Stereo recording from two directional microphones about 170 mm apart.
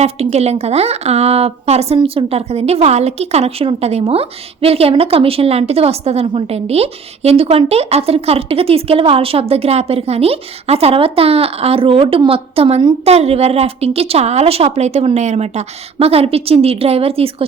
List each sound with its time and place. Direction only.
0.0 s speech: 40° right (ahead or behind)